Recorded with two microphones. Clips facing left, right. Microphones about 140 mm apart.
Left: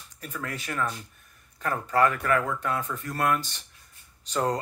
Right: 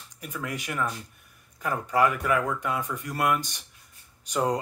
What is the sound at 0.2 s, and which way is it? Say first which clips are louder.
Speech: right 1 dB; 15° right (ahead or behind).